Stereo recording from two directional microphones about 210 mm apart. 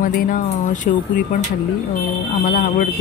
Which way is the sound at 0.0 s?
40° left (ahead or behind).